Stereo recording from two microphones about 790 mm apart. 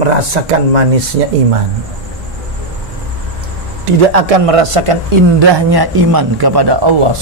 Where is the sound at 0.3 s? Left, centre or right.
Right.